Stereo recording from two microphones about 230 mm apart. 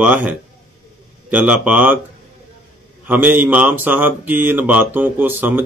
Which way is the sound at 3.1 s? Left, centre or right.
Centre.